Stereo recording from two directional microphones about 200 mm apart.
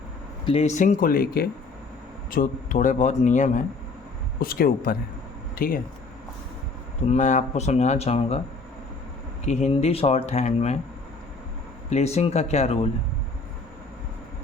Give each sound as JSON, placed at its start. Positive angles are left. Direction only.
{"t": 0.4, "sound": "speech", "side_deg": 30}
{"t": 7.1, "sound": "speech", "side_deg": 35}
{"t": 9.5, "sound": "speech", "side_deg": 35}
{"t": 11.9, "sound": "speech", "side_deg": 35}